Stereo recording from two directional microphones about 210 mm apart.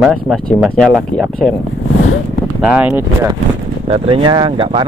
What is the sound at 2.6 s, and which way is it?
Speech, 10° right (ahead or behind).